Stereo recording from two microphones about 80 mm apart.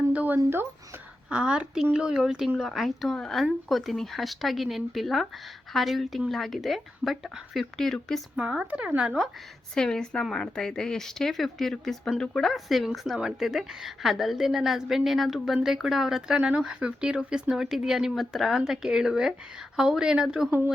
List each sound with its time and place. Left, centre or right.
0.1 s a sound: centre
0.3 s speech: right
1.3 s speech: centre
8.4 s speech: centre
9.7 s a woman's voice: centre